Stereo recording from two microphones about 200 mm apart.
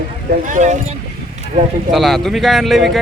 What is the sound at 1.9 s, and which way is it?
Speech, centre (ahead or behind).